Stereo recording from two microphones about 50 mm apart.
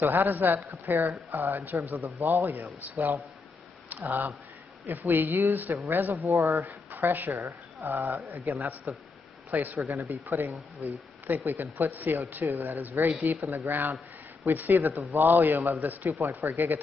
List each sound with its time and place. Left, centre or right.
0.0 s speech: right
2.1 s a man's voice: right
2.4 s speech: right
6.3 s speech: right
6.7 s a sound: right
7.3 s speech: right
9.5 s speech: right
9.8 s speech: right
10.8 s speech: right
16.1 s speech: right
16.5 s speech: right